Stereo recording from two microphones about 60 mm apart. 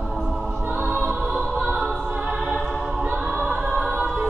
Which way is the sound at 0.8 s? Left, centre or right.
Right.